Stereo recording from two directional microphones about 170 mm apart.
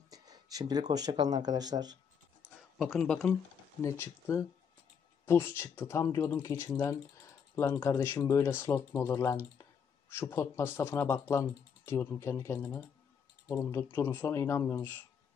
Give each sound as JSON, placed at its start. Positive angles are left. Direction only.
{"t": 0.1, "sound": "speech", "side_deg": -20}
{"t": 2.8, "sound": "speech", "side_deg": 0}
{"t": 3.8, "sound": "speech", "side_deg": 15}